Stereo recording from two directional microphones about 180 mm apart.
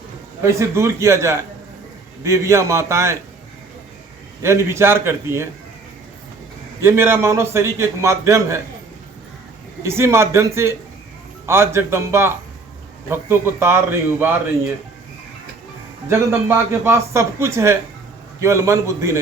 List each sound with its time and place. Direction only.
0.4 s a man's voice: 15° right (ahead or behind)
4.4 s a man's voice: 15° right (ahead or behind)
6.8 s a man's voice: 15° right (ahead or behind)
9.8 s a man's voice: 15° right (ahead or behind)
16.0 s a man's voice: 15° right (ahead or behind)